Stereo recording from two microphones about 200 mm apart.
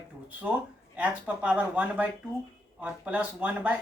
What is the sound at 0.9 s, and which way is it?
Speech, 5° right (ahead or behind).